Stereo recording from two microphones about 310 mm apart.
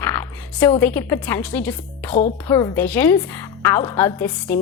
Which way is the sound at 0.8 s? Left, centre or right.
Centre.